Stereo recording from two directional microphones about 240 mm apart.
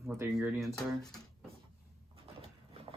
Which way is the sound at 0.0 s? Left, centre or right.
Centre.